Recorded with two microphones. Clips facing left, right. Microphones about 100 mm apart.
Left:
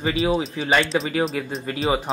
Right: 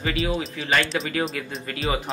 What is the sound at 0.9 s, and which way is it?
Speech, 20° left (ahead or behind).